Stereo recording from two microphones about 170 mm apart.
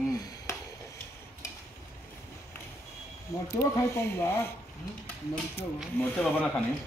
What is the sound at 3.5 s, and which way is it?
Speech, 15° left (ahead or behind).